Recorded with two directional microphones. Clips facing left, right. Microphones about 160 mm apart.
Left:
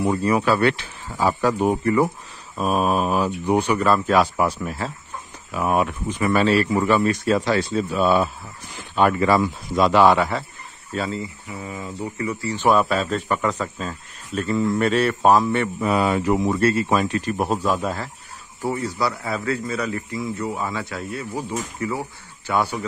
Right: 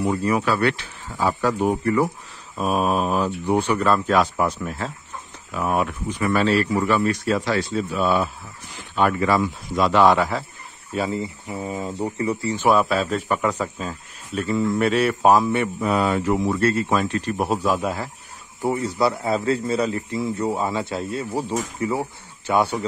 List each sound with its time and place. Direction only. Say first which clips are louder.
0.0 s speech: left 1 dB; 30° left (ahead or behind)
2.5 s mantra: left 1 dB; centre (ahead or behind)
3.3 s speech: left 1 dB; 15° left (ahead or behind)
10.0 s mantra: left 1 dB; centre (ahead or behind)
10.9 s speech: right 2 dB; 15° right (ahead or behind)
11.5 s speech: right 5 dB; 35° right (ahead or behind)
12.5 s speech: left 1 dB; 5° right (ahead or behind)
15.8 s speech: left 2 dB; 10° left (ahead or behind)
17.5 s speech: even; 10° right (ahead or behind)
18.6 s speech: right 3 dB; 20° right (ahead or behind)